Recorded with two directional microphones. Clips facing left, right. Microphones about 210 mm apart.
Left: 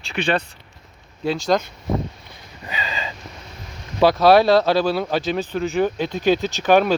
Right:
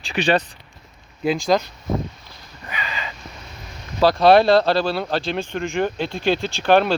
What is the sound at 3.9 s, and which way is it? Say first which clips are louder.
Speech: even; 5° left (ahead or behind).